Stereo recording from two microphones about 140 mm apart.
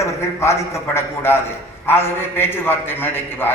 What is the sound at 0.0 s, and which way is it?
A man's voice, 20° left (ahead or behind).